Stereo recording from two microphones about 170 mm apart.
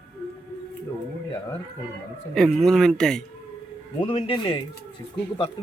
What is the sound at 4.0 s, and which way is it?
Speech, 30° left (ahead or behind).